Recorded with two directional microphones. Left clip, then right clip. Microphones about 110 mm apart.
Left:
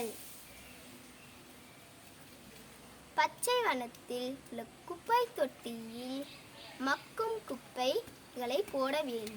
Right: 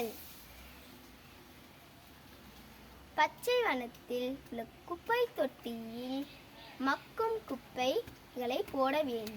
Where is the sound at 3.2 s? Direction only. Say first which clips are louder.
Right 1 dB; 25° left (ahead or behind).